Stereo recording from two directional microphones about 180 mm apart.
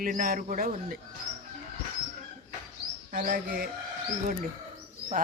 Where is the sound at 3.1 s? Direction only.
50° right (ahead or behind).